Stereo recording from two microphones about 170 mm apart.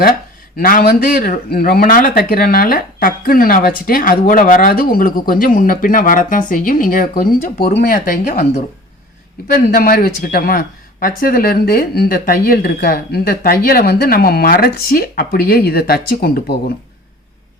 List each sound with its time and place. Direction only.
0.5 s speech: 60° left (ahead or behind)
9.7 s speech: 60° left (ahead or behind)